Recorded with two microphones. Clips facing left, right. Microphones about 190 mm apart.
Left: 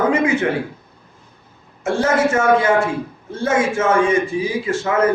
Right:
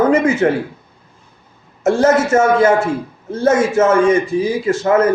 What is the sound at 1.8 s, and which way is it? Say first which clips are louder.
A man's voice: right 4 dB; 40° right (ahead or behind).